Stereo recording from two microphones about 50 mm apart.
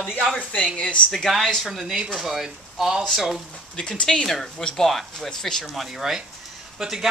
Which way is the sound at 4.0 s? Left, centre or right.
Centre.